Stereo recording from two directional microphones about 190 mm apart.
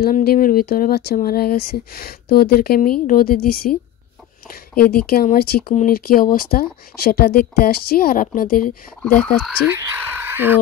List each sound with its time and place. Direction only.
0.0 s speech: 55° left (ahead or behind)
9.4 s speech: 10° right (ahead or behind)